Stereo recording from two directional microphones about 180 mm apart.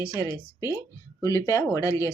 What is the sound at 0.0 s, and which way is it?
A woman's voice, 20° left (ahead or behind).